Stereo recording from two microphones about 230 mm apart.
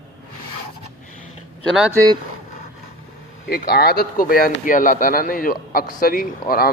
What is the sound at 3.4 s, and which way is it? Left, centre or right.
Speech, left.